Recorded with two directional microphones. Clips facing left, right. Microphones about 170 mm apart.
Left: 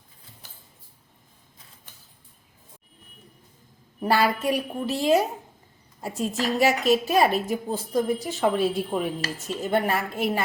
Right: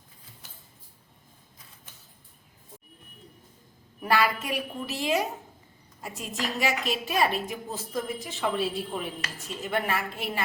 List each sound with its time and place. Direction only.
4.0 s a woman's voice: 35° left (ahead or behind); by 9.0 s 50° left (ahead or behind)
9.2 s a woman's voice: 35° left (ahead or behind)